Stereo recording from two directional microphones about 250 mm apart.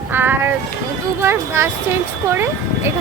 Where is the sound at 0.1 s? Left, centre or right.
Centre.